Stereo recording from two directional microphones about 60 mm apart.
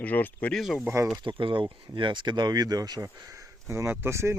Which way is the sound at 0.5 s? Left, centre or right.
Centre.